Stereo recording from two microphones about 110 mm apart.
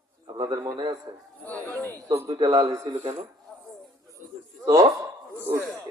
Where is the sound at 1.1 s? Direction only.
45° right (ahead or behind).